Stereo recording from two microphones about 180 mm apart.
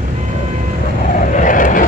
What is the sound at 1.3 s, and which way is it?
Vehicle, 45° left (ahead or behind).